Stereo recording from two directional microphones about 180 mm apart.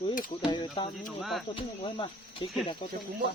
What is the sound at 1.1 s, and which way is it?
Speech, centre (ahead or behind).